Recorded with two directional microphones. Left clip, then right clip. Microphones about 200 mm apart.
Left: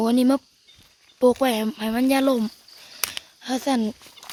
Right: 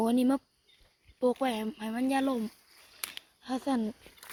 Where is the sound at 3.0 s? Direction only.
45° left (ahead or behind).